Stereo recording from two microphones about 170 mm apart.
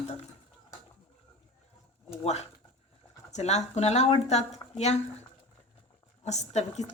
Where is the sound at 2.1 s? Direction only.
40° left (ahead or behind).